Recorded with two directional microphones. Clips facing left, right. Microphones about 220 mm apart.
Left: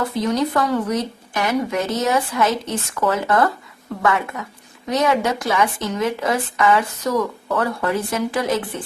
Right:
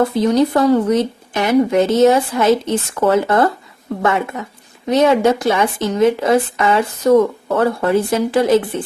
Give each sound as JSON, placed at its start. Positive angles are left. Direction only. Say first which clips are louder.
{"t": 0.2, "sound": "a woman's voice", "louder": "right 4 dB", "side_deg": -30}